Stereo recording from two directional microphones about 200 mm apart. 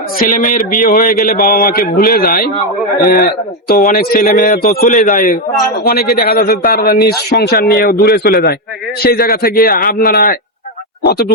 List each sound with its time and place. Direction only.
0.2 s a man's voice: 40° left (ahead or behind)
3.7 s a man's voice: 45° left (ahead or behind)